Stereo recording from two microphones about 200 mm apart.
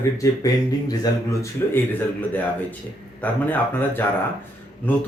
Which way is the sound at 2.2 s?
10° left (ahead or behind).